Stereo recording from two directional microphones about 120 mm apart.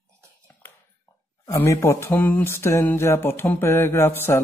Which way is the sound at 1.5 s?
25° left (ahead or behind).